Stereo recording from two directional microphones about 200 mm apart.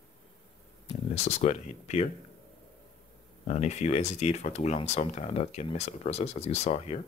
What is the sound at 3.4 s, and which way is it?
Speech, 35° left (ahead or behind).